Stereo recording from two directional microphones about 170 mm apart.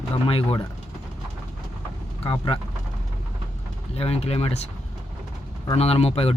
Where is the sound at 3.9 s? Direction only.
35° left (ahead or behind).